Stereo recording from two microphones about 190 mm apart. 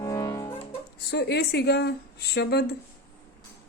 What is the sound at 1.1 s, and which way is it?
Speech, 60° left (ahead or behind).